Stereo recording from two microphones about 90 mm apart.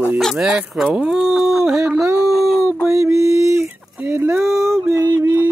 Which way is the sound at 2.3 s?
Centre (ahead or behind).